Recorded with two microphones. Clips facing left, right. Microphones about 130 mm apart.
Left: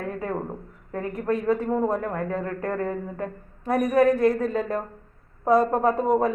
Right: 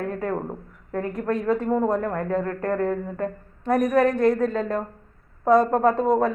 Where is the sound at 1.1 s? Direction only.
5° left (ahead or behind).